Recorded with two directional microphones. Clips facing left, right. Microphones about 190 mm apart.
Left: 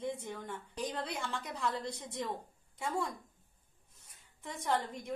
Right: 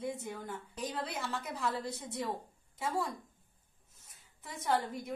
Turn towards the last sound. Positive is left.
turn(degrees=-5)  # may be behind; listen again after turning